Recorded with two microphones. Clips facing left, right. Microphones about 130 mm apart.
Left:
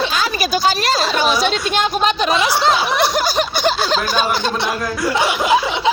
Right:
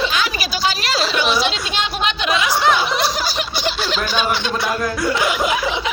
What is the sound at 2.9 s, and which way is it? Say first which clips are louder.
Snicker: left 4 dB; 55° left (ahead or behind).